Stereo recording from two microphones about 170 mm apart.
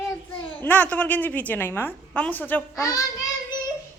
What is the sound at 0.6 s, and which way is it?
A woman's voice, 10° left (ahead or behind).